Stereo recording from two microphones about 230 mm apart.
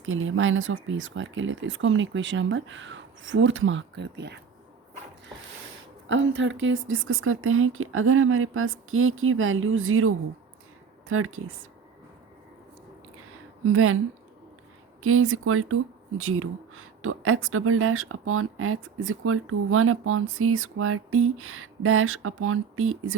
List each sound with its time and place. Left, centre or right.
0.0 s speech: right
6.1 s speech: right
13.7 s speech: right
15.0 s speech: right